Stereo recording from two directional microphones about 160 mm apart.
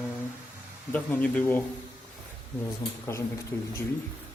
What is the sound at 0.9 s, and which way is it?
Speech, 10° left (ahead or behind).